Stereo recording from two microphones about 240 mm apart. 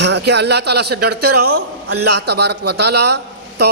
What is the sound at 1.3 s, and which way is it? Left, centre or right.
Speech, right.